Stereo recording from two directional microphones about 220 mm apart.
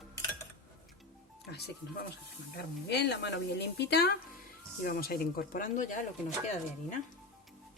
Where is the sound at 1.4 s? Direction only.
45° left (ahead or behind).